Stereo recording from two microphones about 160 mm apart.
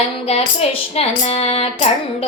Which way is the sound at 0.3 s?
40° left (ahead or behind).